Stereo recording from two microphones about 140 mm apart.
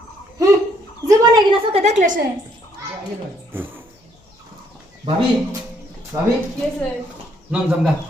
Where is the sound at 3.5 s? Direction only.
15° right (ahead or behind).